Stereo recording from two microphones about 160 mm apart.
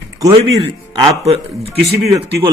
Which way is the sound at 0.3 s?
35° right (ahead or behind).